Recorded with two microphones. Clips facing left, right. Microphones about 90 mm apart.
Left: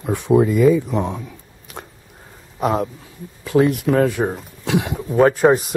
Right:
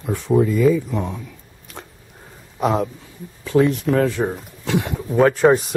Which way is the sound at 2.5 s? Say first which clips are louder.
Even; centre (ahead or behind).